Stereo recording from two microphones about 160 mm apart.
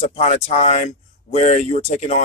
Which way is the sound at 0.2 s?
45° left (ahead or behind).